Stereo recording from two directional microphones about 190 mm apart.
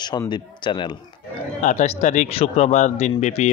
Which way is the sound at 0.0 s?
20° left (ahead or behind).